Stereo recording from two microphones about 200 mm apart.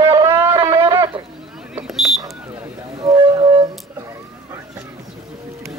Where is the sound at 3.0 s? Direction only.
25° right (ahead or behind).